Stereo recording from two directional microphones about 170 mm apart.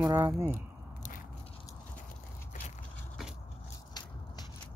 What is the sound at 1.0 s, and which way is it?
Biting, 55° left (ahead or behind).